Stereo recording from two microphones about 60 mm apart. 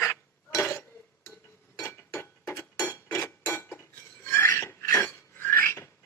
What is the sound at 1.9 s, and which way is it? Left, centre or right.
Mechanisms, left.